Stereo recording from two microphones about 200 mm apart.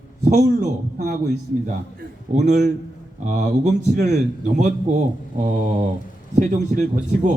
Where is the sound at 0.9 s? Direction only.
40° right (ahead or behind).